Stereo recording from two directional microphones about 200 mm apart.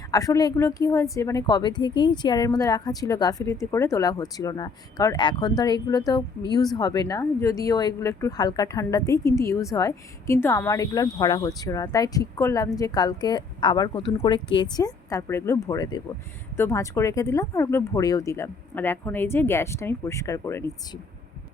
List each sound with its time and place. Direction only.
0.1 s a woman's voice: 15° left (ahead or behind)